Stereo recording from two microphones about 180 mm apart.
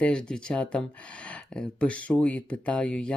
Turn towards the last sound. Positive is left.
turn(degrees=5)  # may be behind; listen again after turning